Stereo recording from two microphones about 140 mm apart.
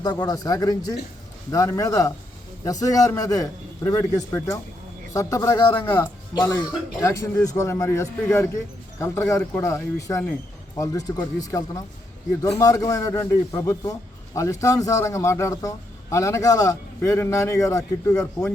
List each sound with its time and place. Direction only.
0.0 s a man's voice: 30° left (ahead or behind)
5.8 s a man's voice: 15° left (ahead or behind)